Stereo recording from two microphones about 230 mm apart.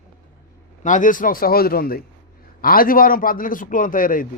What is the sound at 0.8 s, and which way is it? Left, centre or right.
A man's voice, left.